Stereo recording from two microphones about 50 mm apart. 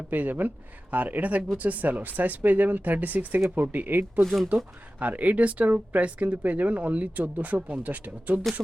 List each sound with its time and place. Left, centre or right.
0.1 s speech: right
4.2 s speech: centre
4.4 s speech: right